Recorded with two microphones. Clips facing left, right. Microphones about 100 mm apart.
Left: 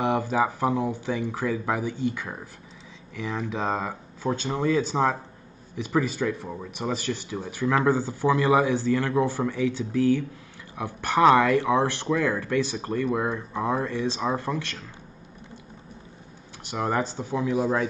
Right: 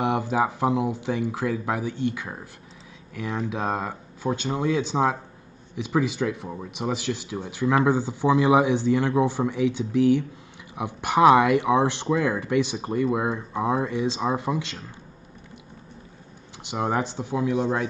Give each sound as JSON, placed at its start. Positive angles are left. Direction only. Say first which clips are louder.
{"t": 0.0, "sound": "speech", "louder": "even", "side_deg": -10}
{"t": 16.7, "sound": "speech", "louder": "right 1 dB", "side_deg": -15}
{"t": 17.2, "sound": "speech", "louder": "right 1 dB", "side_deg": -5}